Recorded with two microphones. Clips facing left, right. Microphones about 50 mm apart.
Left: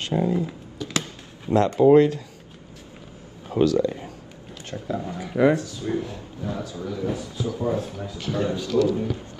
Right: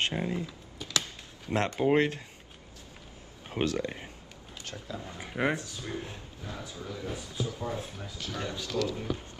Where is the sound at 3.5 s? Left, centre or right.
Right.